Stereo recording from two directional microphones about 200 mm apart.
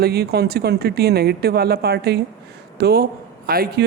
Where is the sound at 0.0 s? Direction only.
50° right (ahead or behind).